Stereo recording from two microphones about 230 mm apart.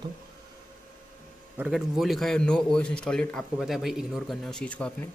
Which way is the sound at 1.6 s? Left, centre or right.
Centre.